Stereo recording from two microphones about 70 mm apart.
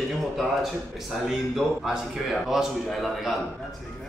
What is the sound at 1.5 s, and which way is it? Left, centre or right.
Speech, centre.